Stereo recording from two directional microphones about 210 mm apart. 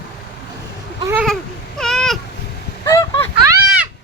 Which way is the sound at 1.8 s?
Centre (ahead or behind).